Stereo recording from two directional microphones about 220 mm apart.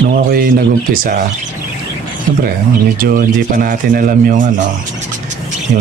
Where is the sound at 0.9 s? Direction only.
40° right (ahead or behind).